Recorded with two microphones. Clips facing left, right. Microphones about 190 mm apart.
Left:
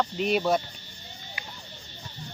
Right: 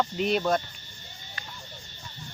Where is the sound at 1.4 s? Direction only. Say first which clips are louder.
Even; 10° left (ahead or behind).